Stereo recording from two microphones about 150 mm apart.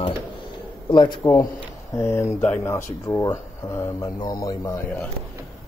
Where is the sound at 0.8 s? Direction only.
30° left (ahead or behind).